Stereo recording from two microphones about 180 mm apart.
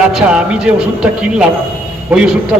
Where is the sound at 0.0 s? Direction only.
5° right (ahead or behind).